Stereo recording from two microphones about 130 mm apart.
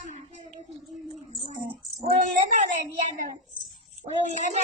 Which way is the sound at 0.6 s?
50° right (ahead or behind).